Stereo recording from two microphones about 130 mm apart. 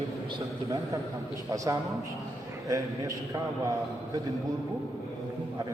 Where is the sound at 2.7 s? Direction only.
25° right (ahead or behind).